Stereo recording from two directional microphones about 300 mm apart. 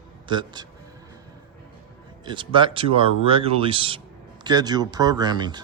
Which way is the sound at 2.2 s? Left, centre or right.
Centre.